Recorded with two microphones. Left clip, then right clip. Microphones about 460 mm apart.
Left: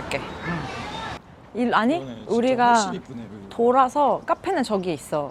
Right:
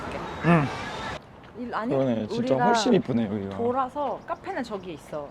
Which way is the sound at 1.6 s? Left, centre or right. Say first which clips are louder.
Left 10 dB; left.